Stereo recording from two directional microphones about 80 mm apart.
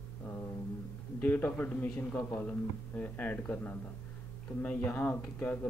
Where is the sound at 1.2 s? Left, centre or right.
Left.